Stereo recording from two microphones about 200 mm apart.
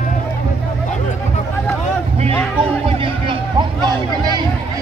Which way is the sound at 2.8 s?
25° right (ahead or behind).